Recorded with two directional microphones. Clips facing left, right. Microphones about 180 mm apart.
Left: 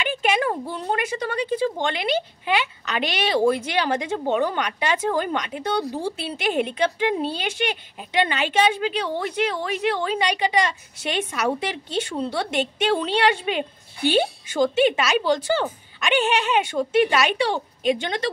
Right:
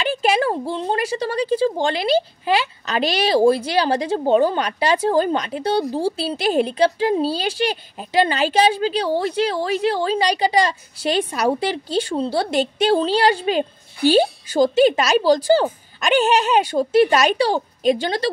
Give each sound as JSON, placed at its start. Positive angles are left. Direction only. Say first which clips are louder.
{"t": 0.0, "sound": "a woman's voice", "louder": "right 4 dB", "side_deg": -35}